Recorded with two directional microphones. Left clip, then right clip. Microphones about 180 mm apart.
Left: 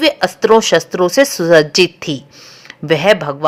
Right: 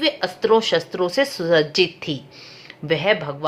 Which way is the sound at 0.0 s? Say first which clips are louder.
Left 8 dB; 40° left (ahead or behind).